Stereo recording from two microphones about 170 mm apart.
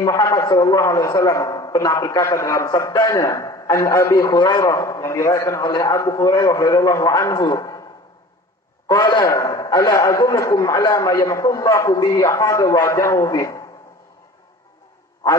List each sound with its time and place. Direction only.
0.0 s a man's voice: 20° left (ahead or behind)
8.8 s a man's voice: 25° left (ahead or behind)